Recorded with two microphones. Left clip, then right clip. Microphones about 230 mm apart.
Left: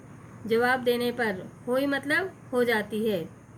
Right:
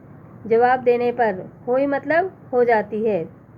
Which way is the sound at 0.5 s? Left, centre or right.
Left.